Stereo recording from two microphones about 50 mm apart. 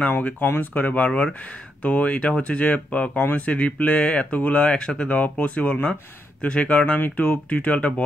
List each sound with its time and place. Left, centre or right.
0.6 s speech: left; by 5.1 s centre
5.1 s speech: left